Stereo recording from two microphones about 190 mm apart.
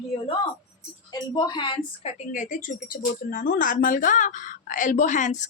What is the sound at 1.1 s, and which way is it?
Speech, 25° left (ahead or behind).